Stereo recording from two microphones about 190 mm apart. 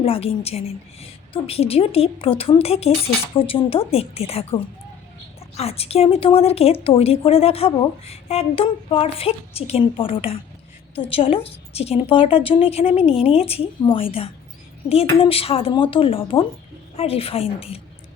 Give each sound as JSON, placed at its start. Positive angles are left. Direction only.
{"t": 0.0, "sound": "a woman's voice", "side_deg": 30}